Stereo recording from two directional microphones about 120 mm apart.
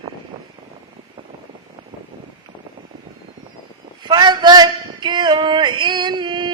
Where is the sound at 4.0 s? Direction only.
35° right (ahead or behind).